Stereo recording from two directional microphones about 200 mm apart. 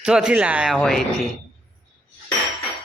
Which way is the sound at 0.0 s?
5° right (ahead or behind).